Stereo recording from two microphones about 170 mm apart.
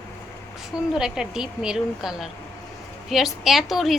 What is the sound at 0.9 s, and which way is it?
A woman's voice, 5° right (ahead or behind).